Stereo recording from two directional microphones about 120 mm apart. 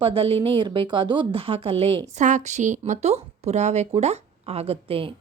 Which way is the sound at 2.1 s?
85° right.